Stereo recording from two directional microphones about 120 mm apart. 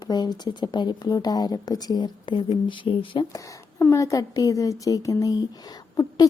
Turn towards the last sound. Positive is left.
turn(degrees=30)  # may be behind; listen again after turning